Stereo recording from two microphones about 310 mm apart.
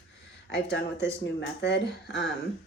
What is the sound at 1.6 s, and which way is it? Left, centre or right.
Speech, left.